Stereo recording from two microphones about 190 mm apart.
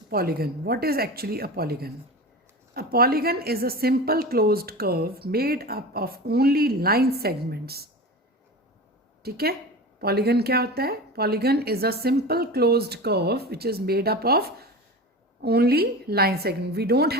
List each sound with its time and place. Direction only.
0.1 s a woman's voice: 55° right (ahead or behind)
9.2 s speech: 55° right (ahead or behind)